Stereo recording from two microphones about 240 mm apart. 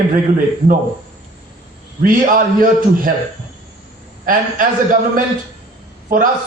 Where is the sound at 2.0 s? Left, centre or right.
Right.